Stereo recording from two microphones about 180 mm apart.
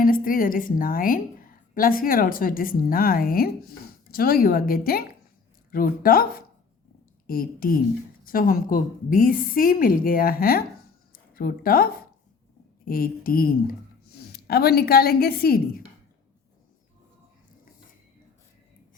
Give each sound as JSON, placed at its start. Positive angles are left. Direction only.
{"t": 0.0, "sound": "a woman's voice", "side_deg": 50}
{"t": 11.1, "sound": "a sound", "side_deg": 50}
{"t": 12.8, "sound": "a woman's voice", "side_deg": 55}